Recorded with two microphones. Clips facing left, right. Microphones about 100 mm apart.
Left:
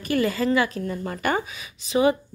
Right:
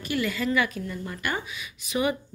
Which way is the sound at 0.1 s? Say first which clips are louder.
Left 5 dB; 35° left (ahead or behind).